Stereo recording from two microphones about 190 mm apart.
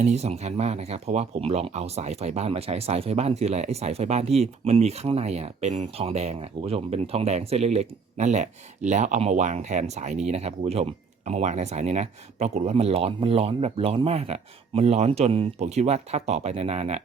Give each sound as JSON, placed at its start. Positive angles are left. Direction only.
{"t": 0.0, "sound": "speech", "side_deg": -35}